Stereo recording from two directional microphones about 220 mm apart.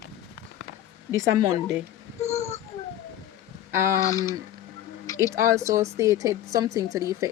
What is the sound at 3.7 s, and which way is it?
Speech, 10° right (ahead or behind).